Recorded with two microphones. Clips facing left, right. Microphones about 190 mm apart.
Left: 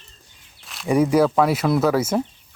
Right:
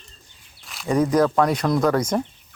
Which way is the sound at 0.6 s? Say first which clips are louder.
Left 1 dB; centre (ahead or behind).